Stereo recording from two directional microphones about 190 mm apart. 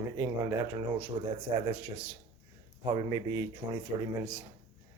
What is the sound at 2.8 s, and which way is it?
Speech, 25° right (ahead or behind).